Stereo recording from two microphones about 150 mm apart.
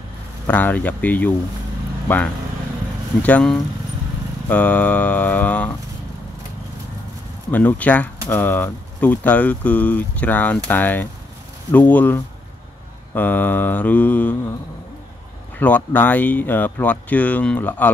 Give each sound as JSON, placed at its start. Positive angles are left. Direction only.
{"t": 0.5, "sound": "speech", "side_deg": 10}
{"t": 7.5, "sound": "speech", "side_deg": 10}
{"t": 15.6, "sound": "speech", "side_deg": 10}